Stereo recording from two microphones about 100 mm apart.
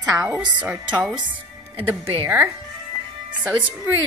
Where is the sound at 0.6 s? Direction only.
10° right (ahead or behind).